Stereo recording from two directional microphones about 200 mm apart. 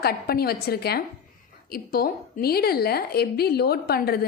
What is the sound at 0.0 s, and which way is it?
A woman's voice, 50° left (ahead or behind).